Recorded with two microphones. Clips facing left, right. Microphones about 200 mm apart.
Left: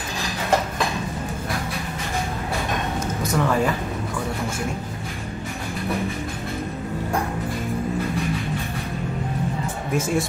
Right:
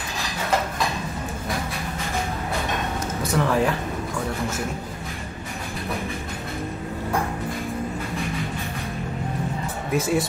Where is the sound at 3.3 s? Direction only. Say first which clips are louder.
Even; centre (ahead or behind).